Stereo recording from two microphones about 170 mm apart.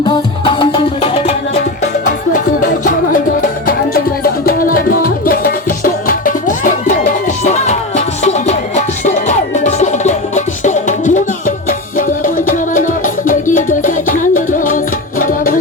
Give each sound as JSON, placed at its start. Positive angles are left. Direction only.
{"t": 0.0, "sound": "music", "side_deg": 25}
{"t": 2.3, "sound": "music", "side_deg": 50}